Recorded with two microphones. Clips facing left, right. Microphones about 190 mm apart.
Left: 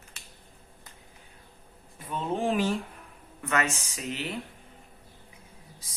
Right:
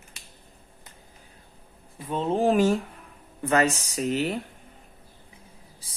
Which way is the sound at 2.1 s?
30° right (ahead or behind).